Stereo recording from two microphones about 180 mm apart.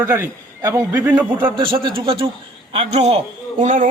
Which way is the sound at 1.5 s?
30° right (ahead or behind).